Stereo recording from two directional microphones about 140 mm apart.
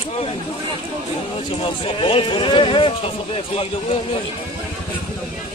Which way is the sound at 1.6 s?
40° left (ahead or behind).